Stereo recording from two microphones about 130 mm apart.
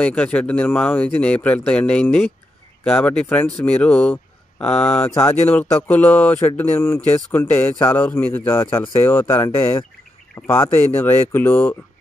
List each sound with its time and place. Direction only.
0.0 s speech: 10° left (ahead or behind)